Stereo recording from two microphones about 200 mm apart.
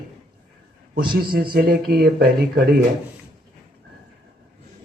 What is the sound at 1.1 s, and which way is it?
Speech, 50° right (ahead or behind).